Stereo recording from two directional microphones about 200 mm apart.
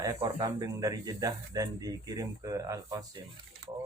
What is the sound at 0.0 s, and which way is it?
Speech, 15° right (ahead or behind).